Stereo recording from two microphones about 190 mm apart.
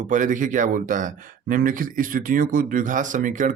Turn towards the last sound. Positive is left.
turn(degrees=-45)  # may be behind; listen again after turning